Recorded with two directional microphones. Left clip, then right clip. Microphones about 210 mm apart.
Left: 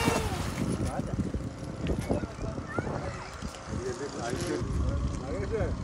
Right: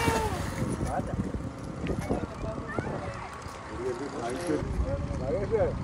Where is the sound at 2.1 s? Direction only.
30° right (ahead or behind).